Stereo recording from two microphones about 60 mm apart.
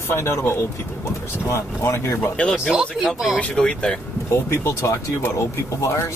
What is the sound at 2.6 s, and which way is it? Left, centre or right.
Speech, centre.